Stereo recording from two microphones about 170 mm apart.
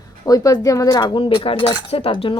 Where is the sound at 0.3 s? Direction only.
20° left (ahead or behind).